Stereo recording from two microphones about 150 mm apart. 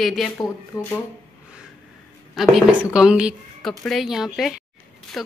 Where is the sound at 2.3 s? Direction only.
5° right (ahead or behind).